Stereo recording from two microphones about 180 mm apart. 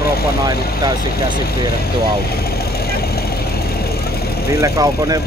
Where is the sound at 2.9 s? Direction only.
60° left (ahead or behind).